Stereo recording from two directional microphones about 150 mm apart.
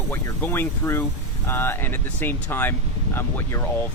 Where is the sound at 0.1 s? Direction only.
15° left (ahead or behind).